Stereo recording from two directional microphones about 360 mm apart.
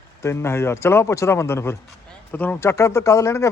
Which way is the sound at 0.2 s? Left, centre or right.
Centre.